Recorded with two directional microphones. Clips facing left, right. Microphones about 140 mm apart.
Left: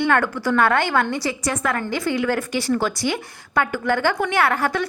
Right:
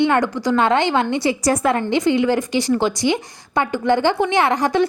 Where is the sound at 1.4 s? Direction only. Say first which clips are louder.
Right 6 dB; 35° right (ahead or behind); by 2.1 s 20° right (ahead or behind).